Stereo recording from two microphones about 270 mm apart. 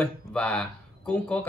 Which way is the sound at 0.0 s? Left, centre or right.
Centre.